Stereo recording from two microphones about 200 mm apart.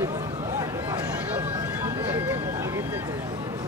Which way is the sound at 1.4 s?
10° right (ahead or behind).